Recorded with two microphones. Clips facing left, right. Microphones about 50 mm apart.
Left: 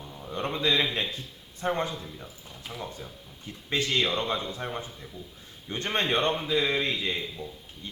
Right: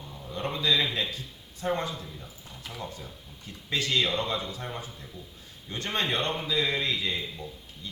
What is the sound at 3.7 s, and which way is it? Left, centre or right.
A man's voice, left.